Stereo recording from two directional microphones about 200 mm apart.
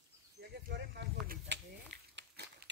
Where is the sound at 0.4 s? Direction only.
55° right (ahead or behind).